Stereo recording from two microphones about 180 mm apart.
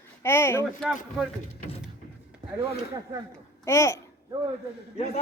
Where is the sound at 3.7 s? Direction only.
15° left (ahead or behind).